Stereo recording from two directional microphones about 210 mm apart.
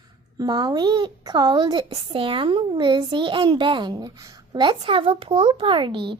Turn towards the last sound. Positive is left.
turn(degrees=-25)  # may be behind; listen again after turning